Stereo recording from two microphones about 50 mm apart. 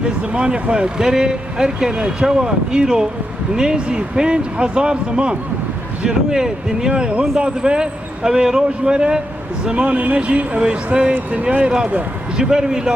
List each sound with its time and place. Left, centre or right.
0.3 s speech: centre